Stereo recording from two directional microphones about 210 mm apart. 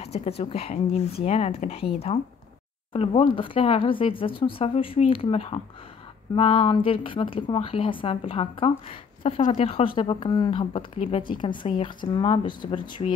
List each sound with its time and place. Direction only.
0.0 s speech: 30° left (ahead or behind)